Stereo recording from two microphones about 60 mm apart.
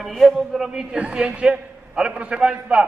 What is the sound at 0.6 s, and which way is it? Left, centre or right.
A man's voice, centre.